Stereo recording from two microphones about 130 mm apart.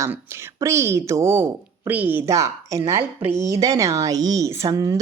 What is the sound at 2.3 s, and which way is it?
Speech, 25° right (ahead or behind).